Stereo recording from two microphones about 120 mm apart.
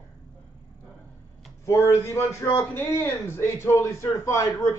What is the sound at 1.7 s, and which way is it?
A man's voice, 25° left (ahead or behind).